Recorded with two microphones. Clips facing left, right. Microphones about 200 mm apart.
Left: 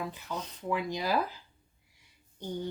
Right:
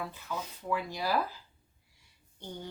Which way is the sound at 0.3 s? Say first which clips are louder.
Even; 20° left (ahead or behind).